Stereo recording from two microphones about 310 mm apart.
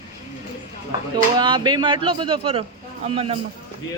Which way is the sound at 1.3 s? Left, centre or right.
Centre.